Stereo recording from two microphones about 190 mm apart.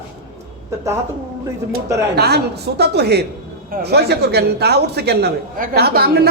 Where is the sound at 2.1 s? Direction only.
60° right (ahead or behind).